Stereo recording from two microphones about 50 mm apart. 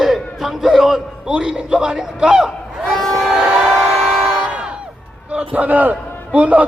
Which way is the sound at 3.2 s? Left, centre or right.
Centre.